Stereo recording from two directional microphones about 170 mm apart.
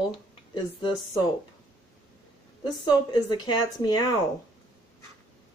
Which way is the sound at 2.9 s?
25° left (ahead or behind).